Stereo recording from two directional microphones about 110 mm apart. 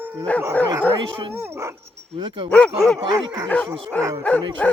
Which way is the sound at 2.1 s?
50° right (ahead or behind).